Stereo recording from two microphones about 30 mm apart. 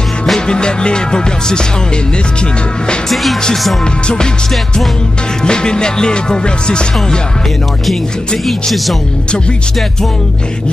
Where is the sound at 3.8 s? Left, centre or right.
Left.